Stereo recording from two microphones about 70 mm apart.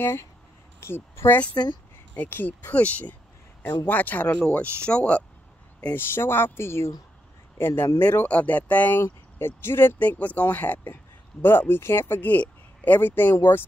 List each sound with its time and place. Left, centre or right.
0.0 s a woman's voice: left; by 5.2 s centre
5.8 s speech: left
9.0 s speech: left